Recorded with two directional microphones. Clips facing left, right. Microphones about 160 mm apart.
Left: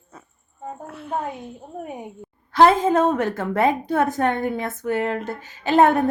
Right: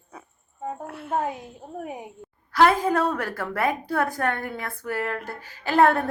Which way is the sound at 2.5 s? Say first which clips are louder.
Left 4 dB; 25° left (ahead or behind).